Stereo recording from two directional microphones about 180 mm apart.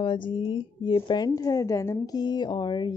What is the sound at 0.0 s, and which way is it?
A woman's voice, 25° left (ahead or behind).